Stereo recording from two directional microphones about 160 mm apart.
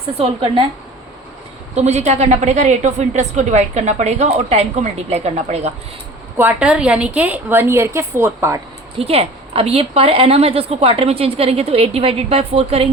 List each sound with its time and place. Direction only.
0.2 s a woman's voice: 35° right (ahead or behind)
1.7 s a woman's voice: 45° right (ahead or behind)
6.3 s a woman's voice: 10° right (ahead or behind)
9.0 s a woman's voice: 40° right (ahead or behind)